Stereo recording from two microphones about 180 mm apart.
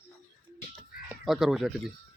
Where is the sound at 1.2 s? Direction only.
Centre (ahead or behind).